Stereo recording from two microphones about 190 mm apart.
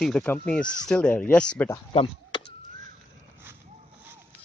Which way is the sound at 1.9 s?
30° left (ahead or behind).